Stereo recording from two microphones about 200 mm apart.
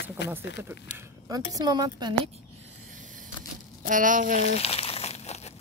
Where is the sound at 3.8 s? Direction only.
40° right (ahead or behind).